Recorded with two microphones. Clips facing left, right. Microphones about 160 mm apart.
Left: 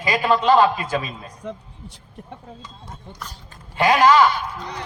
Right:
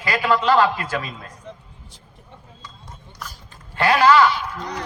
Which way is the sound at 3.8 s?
15° left (ahead or behind).